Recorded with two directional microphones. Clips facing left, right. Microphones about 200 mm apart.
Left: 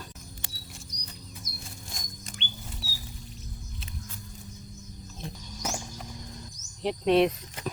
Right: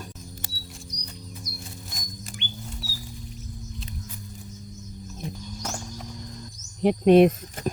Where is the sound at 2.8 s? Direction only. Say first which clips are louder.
Right 4 dB; 40° right (ahead or behind).